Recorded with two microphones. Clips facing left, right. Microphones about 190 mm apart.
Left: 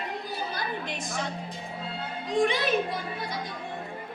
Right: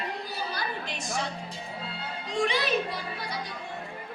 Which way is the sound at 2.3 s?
50° left (ahead or behind).